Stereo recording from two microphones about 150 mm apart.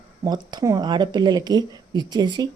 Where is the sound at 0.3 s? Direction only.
30° right (ahead or behind).